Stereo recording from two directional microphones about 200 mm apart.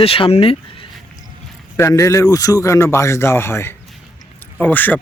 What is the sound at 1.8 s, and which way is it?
Speech, 15° left (ahead or behind).